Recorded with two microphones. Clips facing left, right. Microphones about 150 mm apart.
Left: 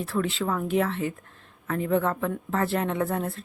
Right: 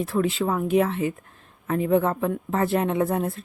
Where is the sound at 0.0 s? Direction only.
15° right (ahead or behind).